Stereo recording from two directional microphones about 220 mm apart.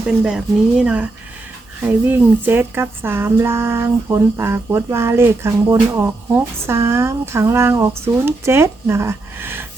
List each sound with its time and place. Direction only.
0.2 s speech: 5° right (ahead or behind)